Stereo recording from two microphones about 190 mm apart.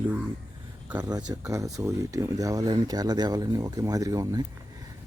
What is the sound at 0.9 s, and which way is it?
Speech, 20° right (ahead or behind).